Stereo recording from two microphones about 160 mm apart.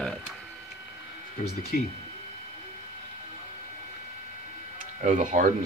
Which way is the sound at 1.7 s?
65° left (ahead or behind).